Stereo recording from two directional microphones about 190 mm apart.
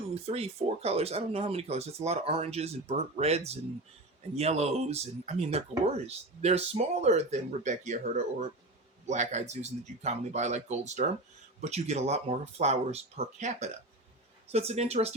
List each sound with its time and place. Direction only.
0.1 s speech: 30° right (ahead or behind)
9.0 s speech: 35° right (ahead or behind)